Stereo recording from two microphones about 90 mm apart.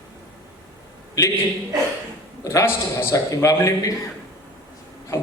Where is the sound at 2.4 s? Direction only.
30° left (ahead or behind).